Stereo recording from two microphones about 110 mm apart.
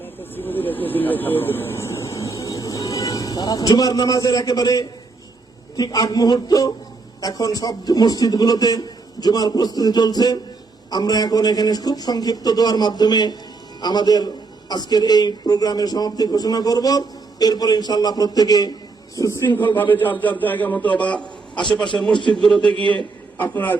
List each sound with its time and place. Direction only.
0.0 s a man's voice: 20° left (ahead or behind)